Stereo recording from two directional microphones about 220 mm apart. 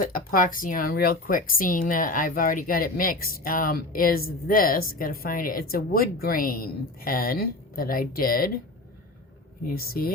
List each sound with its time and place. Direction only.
0.0 s speech: 40° left (ahead or behind)
9.6 s speech: 45° left (ahead or behind)